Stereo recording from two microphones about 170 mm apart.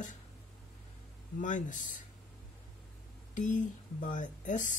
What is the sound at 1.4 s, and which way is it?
Speech, 50° left (ahead or behind).